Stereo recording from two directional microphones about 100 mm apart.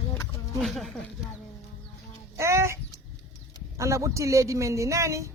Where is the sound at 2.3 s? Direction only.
30° right (ahead or behind).